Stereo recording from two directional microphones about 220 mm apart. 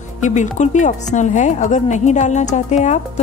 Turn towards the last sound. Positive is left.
turn(degrees=30)  # may be behind; listen again after turning